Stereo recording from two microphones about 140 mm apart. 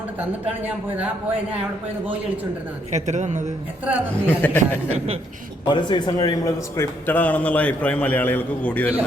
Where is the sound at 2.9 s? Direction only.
55° right (ahead or behind).